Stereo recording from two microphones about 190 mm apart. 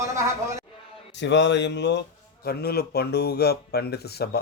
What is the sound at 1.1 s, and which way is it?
Speech, 70° left (ahead or behind).